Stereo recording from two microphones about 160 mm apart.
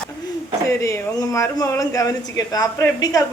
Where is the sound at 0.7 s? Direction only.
15° left (ahead or behind).